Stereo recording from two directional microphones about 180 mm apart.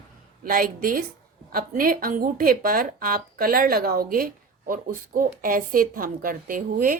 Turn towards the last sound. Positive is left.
turn(degrees=-50)  # may be behind; listen again after turning